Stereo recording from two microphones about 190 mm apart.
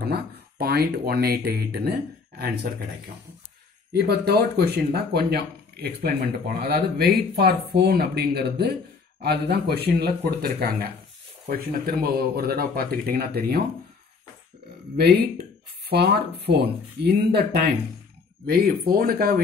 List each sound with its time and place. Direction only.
0.0 s speech: 55° right (ahead or behind)
3.9 s speech: 55° right (ahead or behind)
15.0 s speech: 55° right (ahead or behind)